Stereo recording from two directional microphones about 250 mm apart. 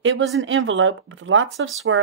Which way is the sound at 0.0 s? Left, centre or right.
Right.